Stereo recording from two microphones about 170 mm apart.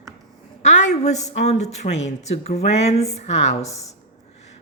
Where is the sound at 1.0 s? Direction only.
40° left (ahead or behind).